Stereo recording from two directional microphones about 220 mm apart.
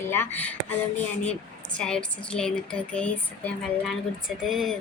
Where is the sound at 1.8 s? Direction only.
5° left (ahead or behind).